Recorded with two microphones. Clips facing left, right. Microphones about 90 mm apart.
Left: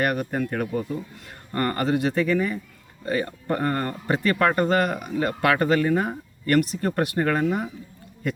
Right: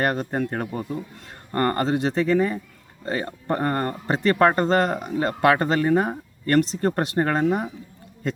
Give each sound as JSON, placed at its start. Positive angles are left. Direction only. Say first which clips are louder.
{"t": 0.0, "sound": "speech", "louder": "right 1 dB", "side_deg": -30}